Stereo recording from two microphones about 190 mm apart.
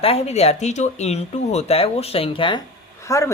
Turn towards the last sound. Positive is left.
turn(degrees=15)  # may be behind; listen again after turning